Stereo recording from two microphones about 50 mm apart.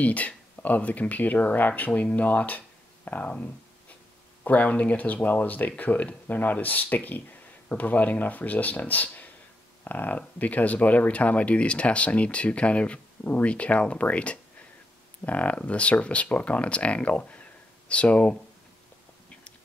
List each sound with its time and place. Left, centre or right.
0.0 s speech: left
4.5 s speech: left